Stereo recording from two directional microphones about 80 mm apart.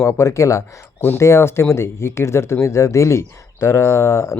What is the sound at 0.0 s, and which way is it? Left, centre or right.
Speech, left.